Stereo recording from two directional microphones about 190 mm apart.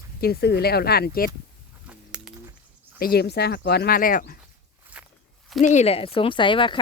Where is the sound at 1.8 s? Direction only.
5° right (ahead or behind).